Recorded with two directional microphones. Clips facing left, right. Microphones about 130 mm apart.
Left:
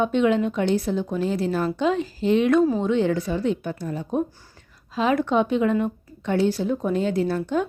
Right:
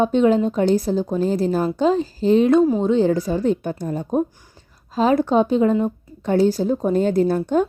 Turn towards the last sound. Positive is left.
turn(degrees=-45)  # may be behind; listen again after turning